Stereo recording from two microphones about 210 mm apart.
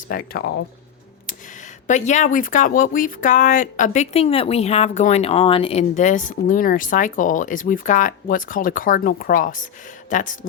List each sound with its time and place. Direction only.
0.1 s speech: 45° left (ahead or behind)
1.9 s speech: 35° left (ahead or behind)